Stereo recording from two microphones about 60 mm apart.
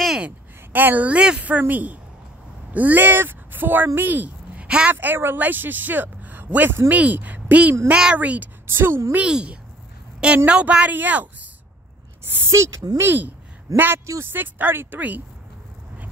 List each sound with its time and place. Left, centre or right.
0.7 s a woman's voice: right
4.6 s a woman's voice: centre
4.9 s a woman's voice: right
8.6 s a woman's voice: right
9.3 s a woman's voice: centre
12.4 s speech: right
13.0 s a woman's voice: right